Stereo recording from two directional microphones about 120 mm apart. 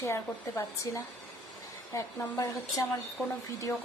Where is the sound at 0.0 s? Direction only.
25° left (ahead or behind).